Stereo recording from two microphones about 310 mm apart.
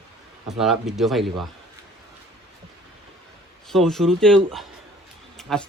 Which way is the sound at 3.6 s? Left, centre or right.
Centre.